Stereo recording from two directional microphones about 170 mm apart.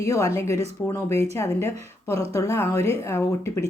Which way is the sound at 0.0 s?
20° left (ahead or behind).